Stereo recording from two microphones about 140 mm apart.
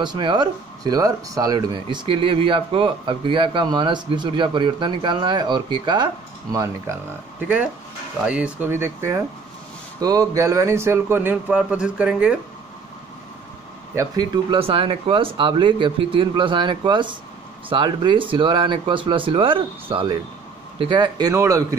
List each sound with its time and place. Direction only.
0.0 s speech: 30° right (ahead or behind)
7.3 s speech: 10° right (ahead or behind)
13.9 s speech: 30° right (ahead or behind)